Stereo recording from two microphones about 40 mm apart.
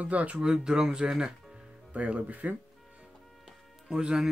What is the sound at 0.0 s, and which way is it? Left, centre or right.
Speech, right.